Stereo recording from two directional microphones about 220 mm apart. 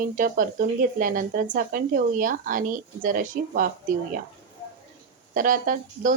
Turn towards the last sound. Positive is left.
turn(degrees=-35)  # may be behind; listen again after turning